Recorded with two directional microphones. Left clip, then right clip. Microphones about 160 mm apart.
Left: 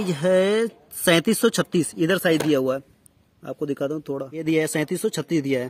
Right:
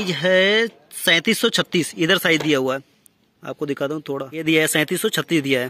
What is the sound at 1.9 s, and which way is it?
Speech, 5° left (ahead or behind).